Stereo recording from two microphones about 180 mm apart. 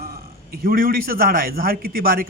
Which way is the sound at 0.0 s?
55° right (ahead or behind).